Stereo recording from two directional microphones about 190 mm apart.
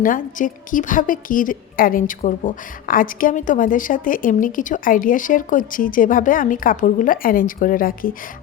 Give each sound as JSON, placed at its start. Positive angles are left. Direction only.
{"t": 0.0, "sound": "a woman's voice", "side_deg": 45}